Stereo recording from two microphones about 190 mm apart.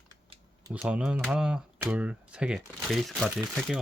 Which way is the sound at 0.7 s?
5° right (ahead or behind).